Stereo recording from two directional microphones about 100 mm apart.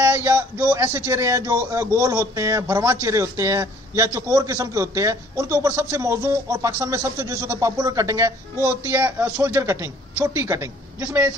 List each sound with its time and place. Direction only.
0.0 s a man's voice: 20° right (ahead or behind)